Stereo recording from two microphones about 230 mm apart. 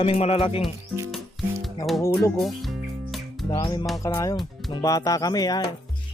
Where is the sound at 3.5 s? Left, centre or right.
Left.